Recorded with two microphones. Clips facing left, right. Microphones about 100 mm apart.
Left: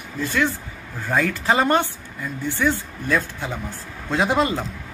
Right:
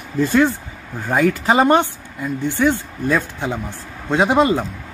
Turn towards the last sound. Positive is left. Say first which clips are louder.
# right 5 dB
turn(degrees=-20)  # may be behind; listen again after turning